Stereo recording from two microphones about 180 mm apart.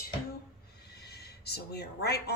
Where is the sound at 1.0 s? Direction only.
65° left (ahead or behind).